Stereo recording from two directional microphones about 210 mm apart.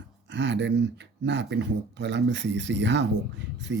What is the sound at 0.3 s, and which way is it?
Speech, 55° right (ahead or behind).